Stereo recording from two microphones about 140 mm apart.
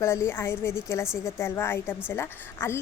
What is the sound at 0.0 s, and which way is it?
Speech, 20° left (ahead or behind).